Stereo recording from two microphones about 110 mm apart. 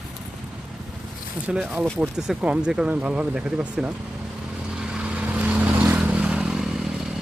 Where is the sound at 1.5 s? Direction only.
10° right (ahead or behind).